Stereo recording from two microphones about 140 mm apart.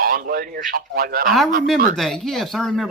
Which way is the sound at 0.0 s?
90° right.